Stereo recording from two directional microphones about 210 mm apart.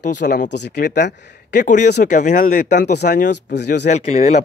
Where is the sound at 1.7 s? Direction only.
35° left (ahead or behind).